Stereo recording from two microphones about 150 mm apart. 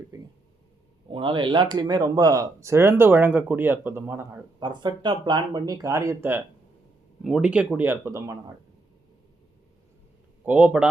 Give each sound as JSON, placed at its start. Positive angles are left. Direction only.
{"t": 1.1, "sound": "speech", "side_deg": -30}
{"t": 4.6, "sound": "speech", "side_deg": -30}
{"t": 7.3, "sound": "speech", "side_deg": -5}
{"t": 10.4, "sound": "speech", "side_deg": -10}